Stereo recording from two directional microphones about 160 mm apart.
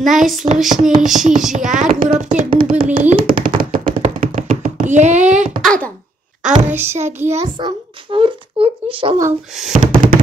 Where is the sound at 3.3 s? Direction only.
60° right (ahead or behind).